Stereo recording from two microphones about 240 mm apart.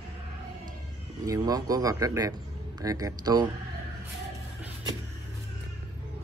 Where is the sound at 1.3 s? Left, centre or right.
Centre.